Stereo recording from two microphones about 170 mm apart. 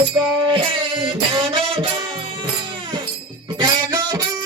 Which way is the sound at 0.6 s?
30° right (ahead or behind).